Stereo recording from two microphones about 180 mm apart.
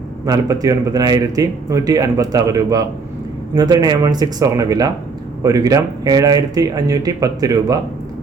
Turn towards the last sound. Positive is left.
turn(degrees=-20)  # may be behind; listen again after turning